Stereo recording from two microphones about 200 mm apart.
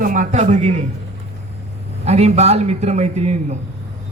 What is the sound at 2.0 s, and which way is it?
A man's voice, 35° right (ahead or behind).